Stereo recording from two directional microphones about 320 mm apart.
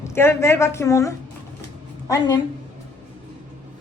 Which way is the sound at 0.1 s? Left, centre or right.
Centre.